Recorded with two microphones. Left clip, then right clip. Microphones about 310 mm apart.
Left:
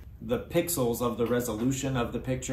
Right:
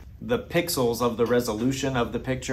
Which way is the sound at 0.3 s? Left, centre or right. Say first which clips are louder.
Right 3 dB; right.